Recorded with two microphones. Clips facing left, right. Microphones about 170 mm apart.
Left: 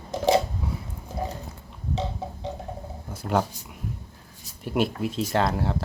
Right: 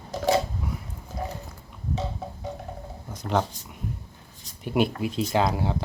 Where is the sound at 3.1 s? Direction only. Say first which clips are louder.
Left 1 dB; 10° left (ahead or behind).